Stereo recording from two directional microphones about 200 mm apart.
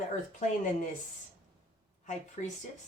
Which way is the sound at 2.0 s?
35° left (ahead or behind).